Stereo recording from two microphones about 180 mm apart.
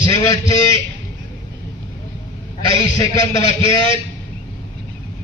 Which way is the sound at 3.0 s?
20° left (ahead or behind).